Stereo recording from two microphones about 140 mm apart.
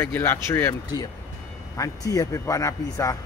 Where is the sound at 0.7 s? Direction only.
30° left (ahead or behind).